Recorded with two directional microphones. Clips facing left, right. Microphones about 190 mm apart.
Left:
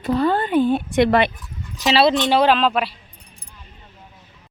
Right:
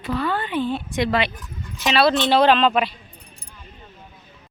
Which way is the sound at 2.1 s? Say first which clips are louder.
Even; 10° left (ahead or behind).